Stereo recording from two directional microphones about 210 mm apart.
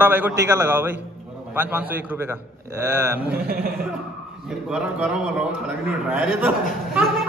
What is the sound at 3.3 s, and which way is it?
Speech, 45° right (ahead or behind).